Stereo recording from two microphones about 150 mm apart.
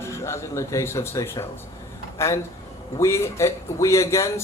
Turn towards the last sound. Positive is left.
turn(degrees=20)  # may be behind; listen again after turning